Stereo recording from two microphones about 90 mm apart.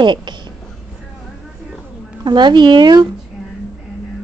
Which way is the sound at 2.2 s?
55° right (ahead or behind).